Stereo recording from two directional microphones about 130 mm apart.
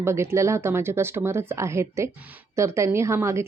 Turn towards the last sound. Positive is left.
turn(degrees=-20)  # may be behind; listen again after turning